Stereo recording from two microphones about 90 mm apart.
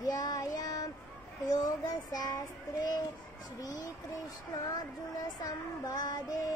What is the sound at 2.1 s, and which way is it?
Child singing, 45° left (ahead or behind).